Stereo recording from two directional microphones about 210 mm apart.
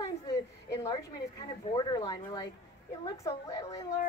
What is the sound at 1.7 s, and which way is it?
A woman's voice, 20° left (ahead or behind).